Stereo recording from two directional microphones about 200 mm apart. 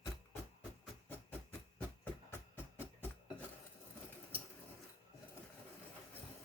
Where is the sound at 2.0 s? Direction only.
10° left (ahead or behind).